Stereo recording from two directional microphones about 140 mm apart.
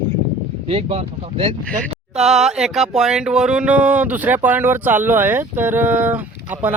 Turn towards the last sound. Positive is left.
turn(degrees=-10)  # may be behind; listen again after turning